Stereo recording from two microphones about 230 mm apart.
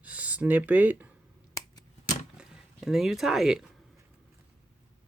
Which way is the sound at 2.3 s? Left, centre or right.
Centre.